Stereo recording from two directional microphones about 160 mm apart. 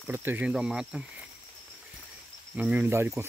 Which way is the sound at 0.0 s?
10° right (ahead or behind).